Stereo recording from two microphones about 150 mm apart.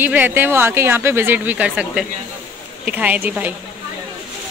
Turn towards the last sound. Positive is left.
turn(degrees=-10)  # may be behind; listen again after turning